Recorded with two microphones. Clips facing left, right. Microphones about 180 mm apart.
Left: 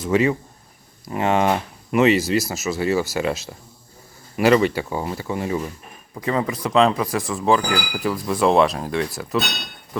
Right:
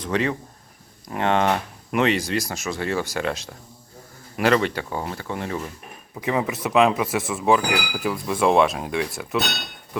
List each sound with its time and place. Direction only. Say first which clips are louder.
0.0 s speech: left 5 dB; 5° left (ahead or behind)
6.1 s speech: left 1 dB; 10° right (ahead or behind)